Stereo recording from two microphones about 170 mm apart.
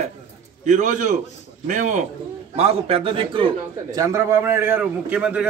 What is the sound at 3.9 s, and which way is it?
A man's voice, 20° right (ahead or behind).